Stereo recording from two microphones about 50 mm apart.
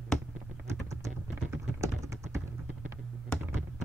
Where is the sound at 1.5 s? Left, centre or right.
Right.